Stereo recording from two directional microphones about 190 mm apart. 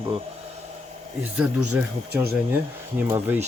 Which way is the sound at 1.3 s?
5° right (ahead or behind).